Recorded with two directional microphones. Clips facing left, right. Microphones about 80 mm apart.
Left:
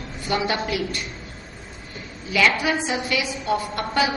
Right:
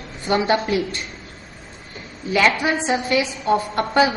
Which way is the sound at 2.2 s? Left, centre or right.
Right.